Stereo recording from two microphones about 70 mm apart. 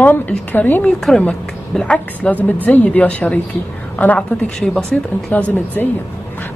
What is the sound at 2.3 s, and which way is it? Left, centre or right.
A woman's voice, left.